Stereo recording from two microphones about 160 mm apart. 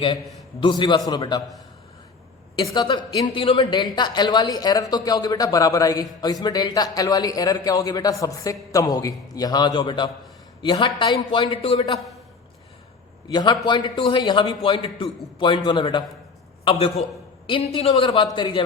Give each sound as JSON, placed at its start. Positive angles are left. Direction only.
{"t": 0.6, "sound": "speech", "side_deg": 30}
{"t": 2.6, "sound": "a man's voice", "side_deg": 25}
{"t": 13.2, "sound": "speech", "side_deg": 25}
{"t": 16.6, "sound": "a man's voice", "side_deg": 35}